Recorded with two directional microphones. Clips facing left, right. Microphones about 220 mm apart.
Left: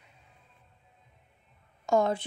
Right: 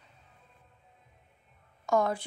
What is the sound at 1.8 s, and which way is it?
Speech, 25° left (ahead or behind).